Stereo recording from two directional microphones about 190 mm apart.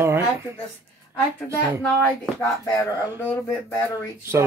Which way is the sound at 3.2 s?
10° left (ahead or behind).